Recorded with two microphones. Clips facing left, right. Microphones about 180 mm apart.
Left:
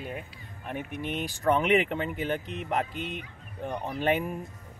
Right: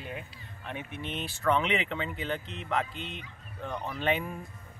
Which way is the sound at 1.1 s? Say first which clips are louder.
Left 2 dB; 15° left (ahead or behind).